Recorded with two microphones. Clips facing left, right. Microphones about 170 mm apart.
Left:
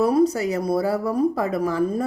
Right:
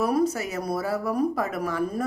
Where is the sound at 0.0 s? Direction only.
30° left (ahead or behind).